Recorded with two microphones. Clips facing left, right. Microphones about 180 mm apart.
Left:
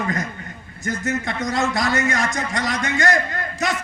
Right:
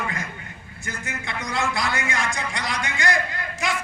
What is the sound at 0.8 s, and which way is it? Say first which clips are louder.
A man's voice: left 10 dB; 45° left (ahead or behind).